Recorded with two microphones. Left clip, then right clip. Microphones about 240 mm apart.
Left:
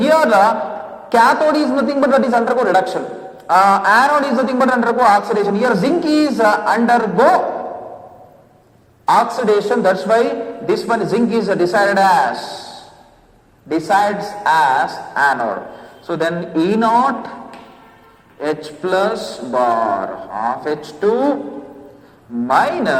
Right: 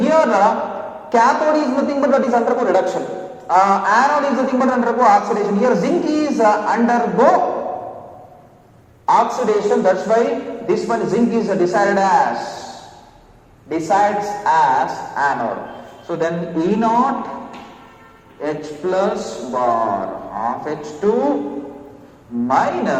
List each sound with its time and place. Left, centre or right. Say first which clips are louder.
0.0 s a sound: left 2 dB; left
1.1 s a man's voice: left 2 dB; left
9.3 s a man's voice: left 1 dB; left
13.7 s a man's voice: left 1 dB; left
18.3 s a man's voice: left 2 dB; left
22.4 s a man's voice: left 2 dB; left